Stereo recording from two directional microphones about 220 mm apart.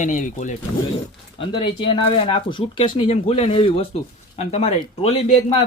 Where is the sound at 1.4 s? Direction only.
20° left (ahead or behind).